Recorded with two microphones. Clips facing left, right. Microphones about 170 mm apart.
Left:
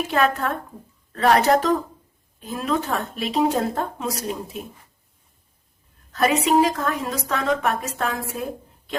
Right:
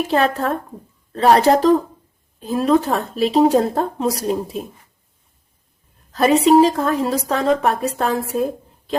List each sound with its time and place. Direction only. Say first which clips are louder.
0.1 s a woman's voice: right 2 dB; 35° right (ahead or behind)
6.1 s a woman's voice: right 6 dB; 30° right (ahead or behind)